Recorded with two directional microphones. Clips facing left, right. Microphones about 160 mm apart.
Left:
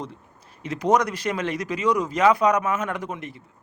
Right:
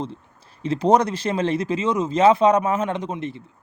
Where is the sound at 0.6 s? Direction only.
30° right (ahead or behind).